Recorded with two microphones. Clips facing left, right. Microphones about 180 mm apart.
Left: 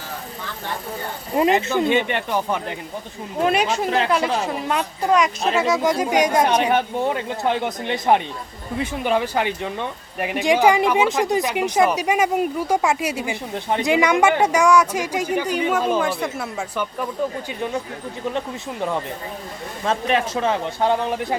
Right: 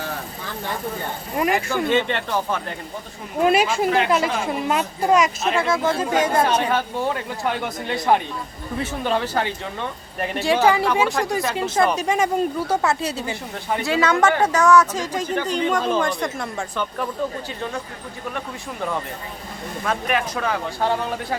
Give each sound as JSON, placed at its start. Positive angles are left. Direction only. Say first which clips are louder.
{"t": 1.4, "sound": "speech", "louder": "left 4 dB", "side_deg": 25}
{"t": 3.4, "sound": "speech", "louder": "right 2 dB", "side_deg": -5}
{"t": 5.5, "sound": "speech", "louder": "left 2 dB", "side_deg": 10}
{"t": 18.3, "sound": "speech", "louder": "left 4 dB", "side_deg": 20}